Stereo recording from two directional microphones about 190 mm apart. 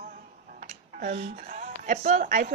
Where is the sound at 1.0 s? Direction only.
35° right (ahead or behind).